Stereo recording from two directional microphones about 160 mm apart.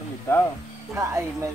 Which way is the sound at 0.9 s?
15° right (ahead or behind).